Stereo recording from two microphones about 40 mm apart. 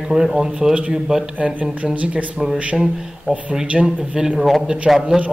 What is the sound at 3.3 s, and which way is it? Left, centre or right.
Speech, right.